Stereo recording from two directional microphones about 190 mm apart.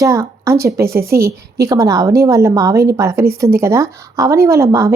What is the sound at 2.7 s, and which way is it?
Speech, 55° right (ahead or behind).